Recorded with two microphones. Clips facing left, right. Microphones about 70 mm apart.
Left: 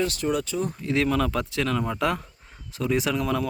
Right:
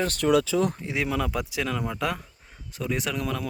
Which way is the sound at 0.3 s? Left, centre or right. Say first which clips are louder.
Right 10 dB; right.